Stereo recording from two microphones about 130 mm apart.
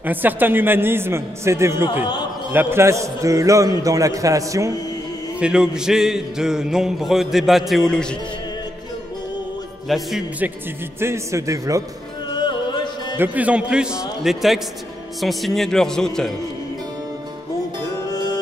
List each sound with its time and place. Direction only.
0.0 s a man's voice: 15° right (ahead or behind)
5.4 s music: 5° right (ahead or behind)
9.8 s music: centre (ahead or behind)
11.0 s a man's voice: 20° right (ahead or behind)
12.4 s music: 35° left (ahead or behind)
13.2 s a man's voice: 10° right (ahead or behind)
15.1 s music: centre (ahead or behind)
18.0 s music: 30° left (ahead or behind)